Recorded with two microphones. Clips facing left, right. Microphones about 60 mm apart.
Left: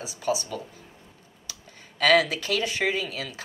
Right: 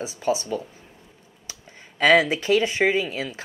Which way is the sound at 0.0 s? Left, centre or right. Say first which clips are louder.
Right 3 dB; right.